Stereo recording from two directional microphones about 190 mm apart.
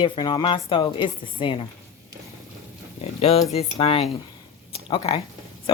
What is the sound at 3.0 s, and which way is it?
Speech, 35° left (ahead or behind).